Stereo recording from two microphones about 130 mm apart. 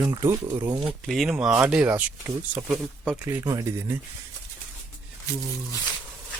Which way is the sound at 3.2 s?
25° right (ahead or behind).